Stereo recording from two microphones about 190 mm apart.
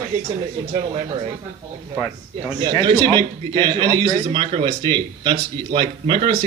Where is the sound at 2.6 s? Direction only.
25° right (ahead or behind).